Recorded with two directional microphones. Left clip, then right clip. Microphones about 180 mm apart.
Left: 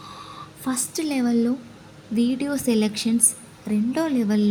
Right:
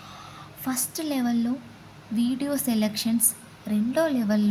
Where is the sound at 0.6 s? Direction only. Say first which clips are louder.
Left 3 dB; 15° left (ahead or behind).